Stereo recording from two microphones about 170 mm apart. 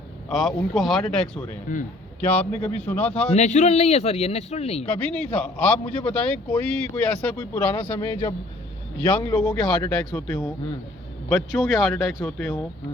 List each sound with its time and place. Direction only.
0.3 s speech: centre (ahead or behind)
1.7 s a man's voice: 50° left (ahead or behind)
2.2 s a man's voice: 5° left (ahead or behind)
3.3 s speech: 45° left (ahead or behind)
4.9 s a man's voice: 5° left (ahead or behind)